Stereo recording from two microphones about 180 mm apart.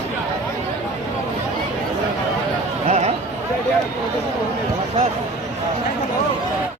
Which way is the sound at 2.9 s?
35° right (ahead or behind).